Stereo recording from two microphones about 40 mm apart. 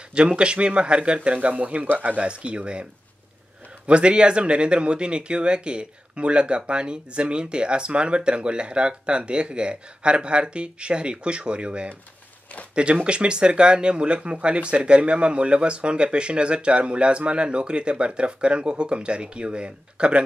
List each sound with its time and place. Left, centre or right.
0.1 s speech: right